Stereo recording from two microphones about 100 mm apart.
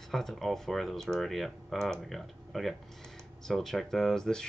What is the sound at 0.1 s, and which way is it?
Speech, 5° left (ahead or behind).